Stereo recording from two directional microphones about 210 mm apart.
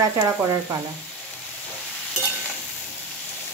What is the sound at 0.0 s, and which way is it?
Speech, 15° right (ahead or behind).